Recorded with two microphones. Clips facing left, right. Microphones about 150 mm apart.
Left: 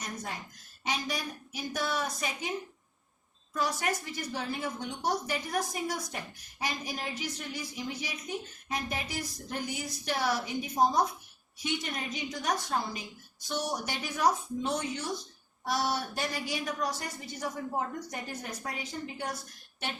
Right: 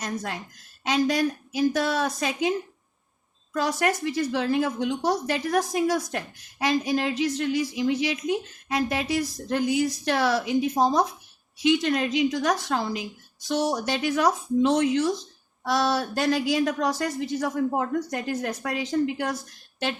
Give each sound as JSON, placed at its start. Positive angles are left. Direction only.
{"t": 0.0, "sound": "a woman's voice", "side_deg": -90}
{"t": 3.5, "sound": "a woman's voice", "side_deg": -90}